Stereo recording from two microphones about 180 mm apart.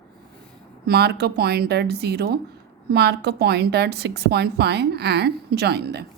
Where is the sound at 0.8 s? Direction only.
60° right (ahead or behind).